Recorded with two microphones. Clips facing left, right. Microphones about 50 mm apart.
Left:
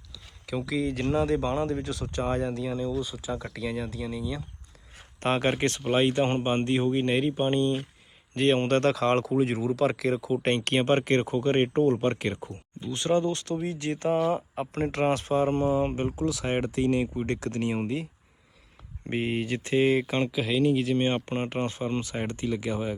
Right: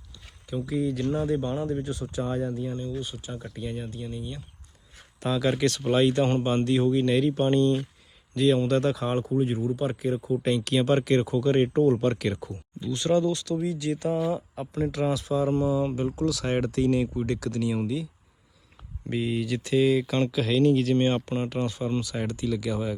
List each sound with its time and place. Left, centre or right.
0.4 s speech: left
5.2 s speech: left
5.5 s speech: left
7.3 s speech: centre
8.4 s speech: left
11.9 s speech: left
17.2 s speech: left
19.1 s speech: left
20.1 s speech: centre
21.2 s speech: left